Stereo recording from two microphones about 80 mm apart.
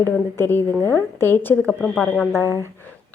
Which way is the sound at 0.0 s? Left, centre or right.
Left.